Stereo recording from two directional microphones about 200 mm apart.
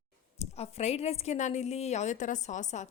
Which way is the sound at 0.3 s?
30° left (ahead or behind).